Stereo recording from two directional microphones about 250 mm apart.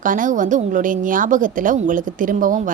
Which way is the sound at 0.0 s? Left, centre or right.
Right.